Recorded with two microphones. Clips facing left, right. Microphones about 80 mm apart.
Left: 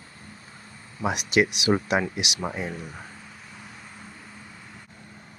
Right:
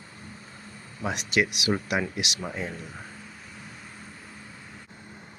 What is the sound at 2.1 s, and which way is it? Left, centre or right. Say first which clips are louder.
Speech: left 2 dB; centre.